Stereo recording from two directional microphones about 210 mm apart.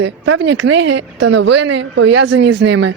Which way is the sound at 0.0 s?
55° right (ahead or behind).